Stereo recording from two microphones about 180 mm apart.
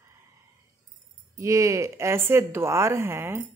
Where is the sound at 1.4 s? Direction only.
15° right (ahead or behind).